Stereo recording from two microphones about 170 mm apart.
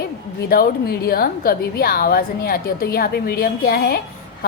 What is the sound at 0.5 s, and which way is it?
A woman's voice, 60° left (ahead or behind).